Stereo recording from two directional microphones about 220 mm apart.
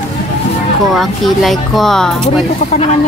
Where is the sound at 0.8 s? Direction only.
Centre (ahead or behind).